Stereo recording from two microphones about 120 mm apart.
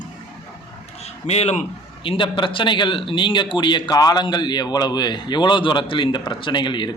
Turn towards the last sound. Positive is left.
turn(degrees=40)  # may be behind; listen again after turning